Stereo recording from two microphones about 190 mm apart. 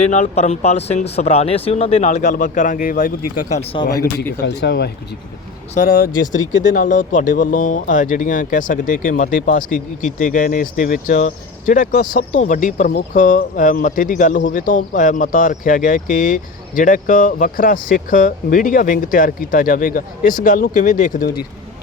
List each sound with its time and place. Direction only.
0.0 s speech: 40° left (ahead or behind)
3.6 s speech: 30° left (ahead or behind)
3.8 s speech: 55° left (ahead or behind)
5.7 s speech: 50° left (ahead or behind)